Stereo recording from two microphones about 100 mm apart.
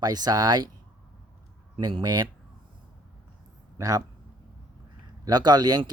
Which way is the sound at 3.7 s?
35° right (ahead or behind).